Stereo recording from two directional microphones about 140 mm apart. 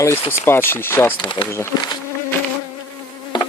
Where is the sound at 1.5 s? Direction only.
20° left (ahead or behind).